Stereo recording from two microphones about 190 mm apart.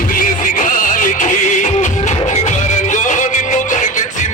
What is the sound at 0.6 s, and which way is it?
Music, 45° left (ahead or behind).